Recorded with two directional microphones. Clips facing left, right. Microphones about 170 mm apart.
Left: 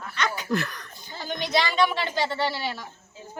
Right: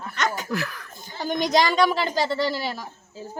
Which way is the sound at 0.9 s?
45° right (ahead or behind).